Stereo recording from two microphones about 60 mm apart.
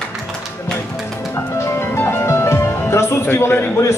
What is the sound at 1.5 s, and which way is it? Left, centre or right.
Music, left.